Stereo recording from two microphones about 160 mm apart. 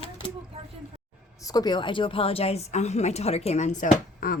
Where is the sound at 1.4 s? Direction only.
25° left (ahead or behind).